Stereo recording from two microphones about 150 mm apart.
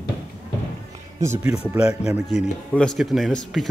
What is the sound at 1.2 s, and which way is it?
Speech, 15° right (ahead or behind).